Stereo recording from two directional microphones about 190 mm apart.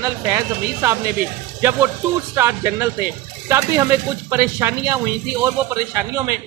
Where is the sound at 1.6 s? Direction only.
10° right (ahead or behind).